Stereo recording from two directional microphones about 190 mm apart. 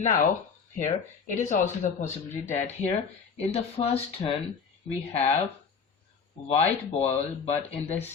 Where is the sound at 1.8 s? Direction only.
40° left (ahead or behind).